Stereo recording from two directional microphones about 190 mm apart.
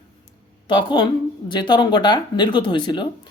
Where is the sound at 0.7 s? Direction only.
25° left (ahead or behind).